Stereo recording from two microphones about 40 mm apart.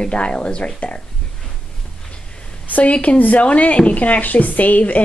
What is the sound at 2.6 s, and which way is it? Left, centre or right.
Speech, left.